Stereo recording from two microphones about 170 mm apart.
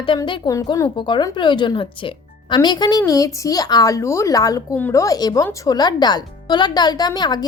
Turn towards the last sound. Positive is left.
turn(degrees=25)  # may be behind; listen again after turning